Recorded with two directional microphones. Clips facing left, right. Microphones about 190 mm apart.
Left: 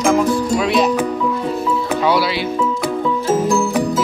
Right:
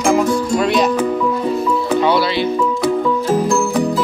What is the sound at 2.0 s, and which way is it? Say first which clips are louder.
Speech: right 2 dB; 5° left (ahead or behind).